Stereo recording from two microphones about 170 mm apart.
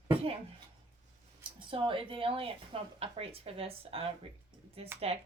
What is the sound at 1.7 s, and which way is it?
A woman's voice, 30° right (ahead or behind).